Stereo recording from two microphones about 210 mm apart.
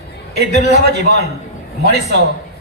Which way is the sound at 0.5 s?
35° left (ahead or behind).